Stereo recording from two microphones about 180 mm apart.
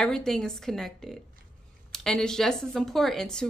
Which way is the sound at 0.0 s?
5° left (ahead or behind).